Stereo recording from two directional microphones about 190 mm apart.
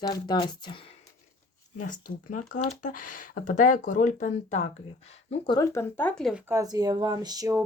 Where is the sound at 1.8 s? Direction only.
45° left (ahead or behind).